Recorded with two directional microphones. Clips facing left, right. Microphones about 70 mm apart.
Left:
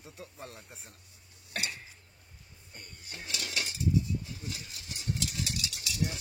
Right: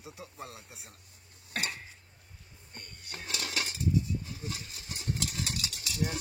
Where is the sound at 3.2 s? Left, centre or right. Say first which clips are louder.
Right 1 dB; right.